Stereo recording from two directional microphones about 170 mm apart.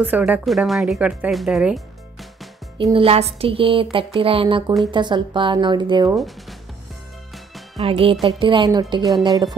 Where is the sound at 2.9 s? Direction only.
35° right (ahead or behind).